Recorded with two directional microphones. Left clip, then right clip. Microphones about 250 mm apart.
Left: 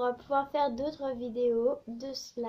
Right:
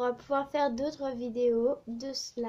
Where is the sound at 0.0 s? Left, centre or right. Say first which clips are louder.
Left 1 dB; right.